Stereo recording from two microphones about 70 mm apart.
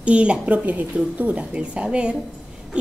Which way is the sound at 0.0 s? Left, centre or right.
Centre.